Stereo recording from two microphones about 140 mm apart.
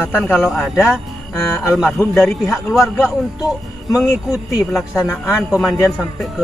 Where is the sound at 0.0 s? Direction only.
15° left (ahead or behind).